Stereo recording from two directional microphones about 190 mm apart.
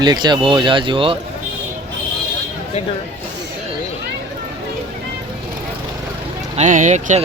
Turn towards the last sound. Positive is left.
turn(degrees=-40)  # may be behind; listen again after turning